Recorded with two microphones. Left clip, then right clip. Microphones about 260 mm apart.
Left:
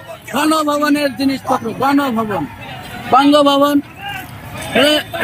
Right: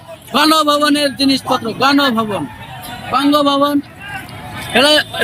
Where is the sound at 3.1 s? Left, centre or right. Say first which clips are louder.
Left 3 dB; centre.